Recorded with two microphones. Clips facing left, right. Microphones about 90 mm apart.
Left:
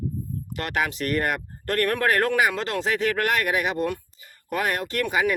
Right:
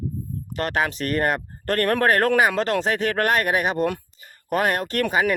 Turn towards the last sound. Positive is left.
turn(degrees=-45)  # may be behind; listen again after turning